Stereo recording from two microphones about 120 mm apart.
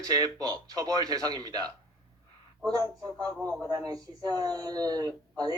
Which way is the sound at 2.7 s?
30° right (ahead or behind).